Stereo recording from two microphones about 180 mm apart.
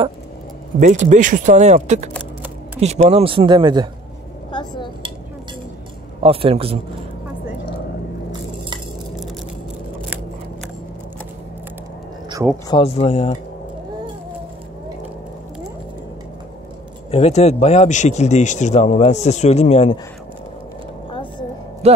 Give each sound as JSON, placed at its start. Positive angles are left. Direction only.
{"t": 0.7, "sound": "speech", "side_deg": -45}
{"t": 4.5, "sound": "chopping", "side_deg": 25}
{"t": 6.2, "sound": "speech", "side_deg": -30}
{"t": 12.6, "sound": "speech", "side_deg": 30}
{"t": 17.1, "sound": "speech", "side_deg": 35}
{"t": 21.1, "sound": "a sound", "side_deg": 25}
{"t": 21.8, "sound": "a sound", "side_deg": -35}